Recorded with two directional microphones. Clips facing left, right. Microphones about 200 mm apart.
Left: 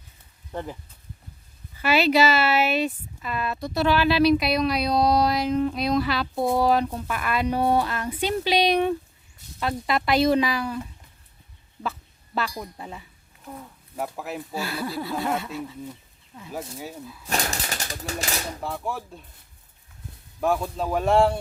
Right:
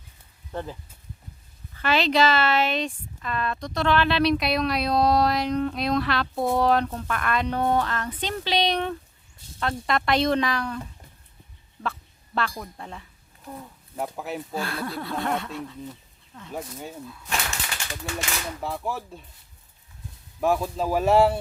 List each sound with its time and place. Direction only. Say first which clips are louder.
0.5 s speech: even; 15° left (ahead or behind)
1.8 s speech: left 2 dB; 10° left (ahead or behind)
11.8 s a sound: even; 5° left (ahead or behind)
12.8 s speech: left 1 dB; 5° left (ahead or behind)
17.2 s speech: left 4 dB; 40° left (ahead or behind)
18.6 s speech: even; centre (ahead or behind)
20.4 s speech: right 1 dB; centre (ahead or behind)